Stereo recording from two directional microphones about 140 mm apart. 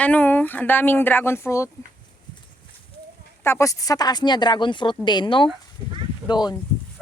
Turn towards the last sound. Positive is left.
turn(degrees=30)  # may be behind; listen again after turning